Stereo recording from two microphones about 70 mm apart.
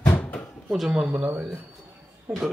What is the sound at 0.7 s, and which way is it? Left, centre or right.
Speech, centre.